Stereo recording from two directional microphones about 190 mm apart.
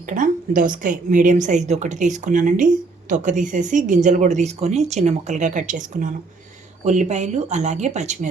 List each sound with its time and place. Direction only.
0.1 s speech: 45° right (ahead or behind)